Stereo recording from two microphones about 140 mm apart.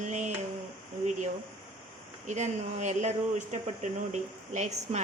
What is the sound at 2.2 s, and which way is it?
Speech, 55° right (ahead or behind).